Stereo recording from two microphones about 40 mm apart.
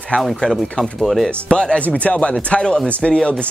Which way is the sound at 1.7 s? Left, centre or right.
Left.